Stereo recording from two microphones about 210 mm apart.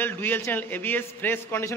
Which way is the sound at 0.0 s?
10° left (ahead or behind).